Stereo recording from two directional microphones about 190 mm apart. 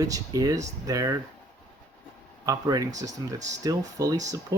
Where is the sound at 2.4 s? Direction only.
20° right (ahead or behind).